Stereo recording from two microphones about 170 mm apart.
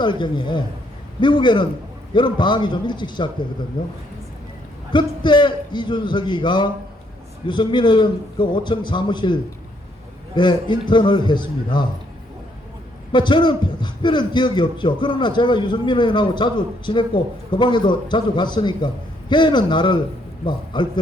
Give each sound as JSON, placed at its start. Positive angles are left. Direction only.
{"t": 0.0, "sound": "a man's voice", "side_deg": 25}
{"t": 4.9, "sound": "a man's voice", "side_deg": 25}
{"t": 13.1, "sound": "a man's voice", "side_deg": 25}